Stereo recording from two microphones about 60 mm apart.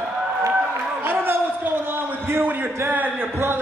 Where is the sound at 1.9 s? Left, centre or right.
Right.